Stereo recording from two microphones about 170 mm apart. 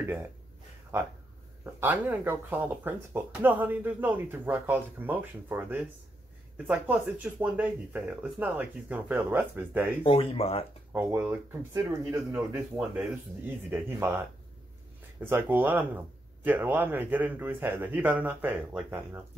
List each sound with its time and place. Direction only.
0.0 s speech: 10° right (ahead or behind)
1.6 s speech: 10° right (ahead or behind)
10.0 s speech: 35° left (ahead or behind)
10.9 s speech: 15° right (ahead or behind)